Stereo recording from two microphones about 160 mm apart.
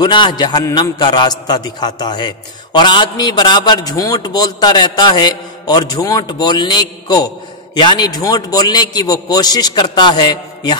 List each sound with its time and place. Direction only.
0.0 s a man's voice: 30° left (ahead or behind)